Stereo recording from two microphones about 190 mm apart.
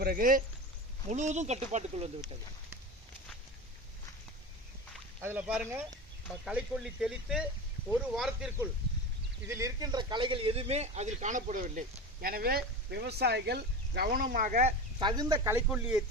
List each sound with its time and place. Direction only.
0.0 s speech: 50° right (ahead or behind)
5.2 s speech: 10° right (ahead or behind)
9.5 s speech: 15° right (ahead or behind); by 15.0 s 35° right (ahead or behind)
15.0 s speech: 20° right (ahead or behind)
15.5 s speech: 5° right (ahead or behind)